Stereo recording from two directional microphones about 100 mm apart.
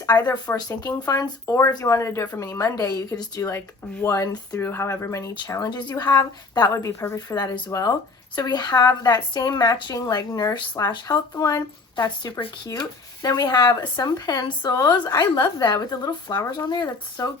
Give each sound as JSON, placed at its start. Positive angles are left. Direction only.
{"t": 0.1, "sound": "a woman's voice", "side_deg": 40}
{"t": 4.6, "sound": "a woman's voice", "side_deg": 25}